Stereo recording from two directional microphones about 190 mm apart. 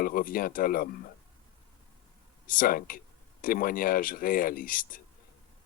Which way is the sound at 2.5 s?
50° left (ahead or behind).